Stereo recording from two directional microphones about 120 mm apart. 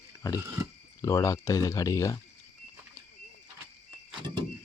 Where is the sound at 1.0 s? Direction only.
25° left (ahead or behind).